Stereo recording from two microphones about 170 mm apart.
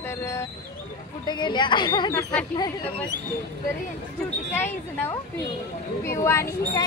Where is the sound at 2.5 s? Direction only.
25° left (ahead or behind).